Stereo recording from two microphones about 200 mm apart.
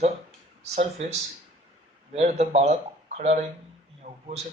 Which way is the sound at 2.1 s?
35° right (ahead or behind).